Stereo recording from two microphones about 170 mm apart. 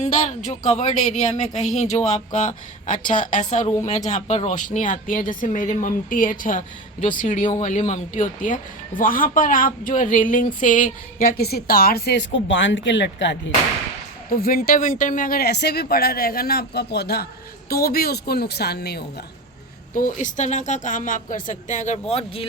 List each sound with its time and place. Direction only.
0.0 s speech: 45° left (ahead or behind); by 13.3 s 90° left
14.3 s speech: 60° left (ahead or behind)
19.9 s speech: 50° left (ahead or behind)